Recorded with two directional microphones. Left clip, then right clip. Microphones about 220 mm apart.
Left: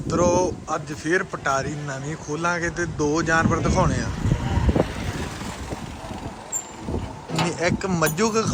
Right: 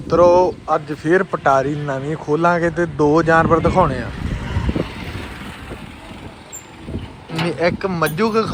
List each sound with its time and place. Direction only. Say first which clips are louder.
0.1 s speech: right 9 dB; 10° left (ahead or behind)
4.6 s vehicle: left 1 dB; 50° left (ahead or behind)
7.4 s a sound: right 6 dB; centre (ahead or behind)
8.2 s speech: right 6 dB; 15° left (ahead or behind)